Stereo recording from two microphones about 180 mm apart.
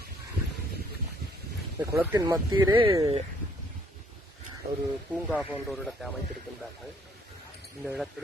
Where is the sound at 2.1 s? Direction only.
20° right (ahead or behind).